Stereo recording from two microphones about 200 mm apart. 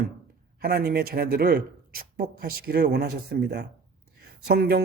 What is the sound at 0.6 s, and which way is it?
A man's voice, 50° right (ahead or behind).